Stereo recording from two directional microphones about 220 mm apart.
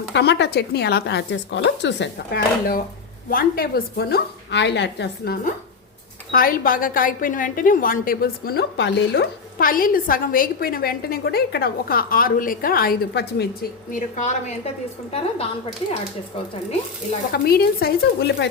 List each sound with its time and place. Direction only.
0.1 s a woman's voice: 50° left (ahead or behind); by 14.7 s 30° left (ahead or behind)
17.3 s a woman's voice: 45° left (ahead or behind)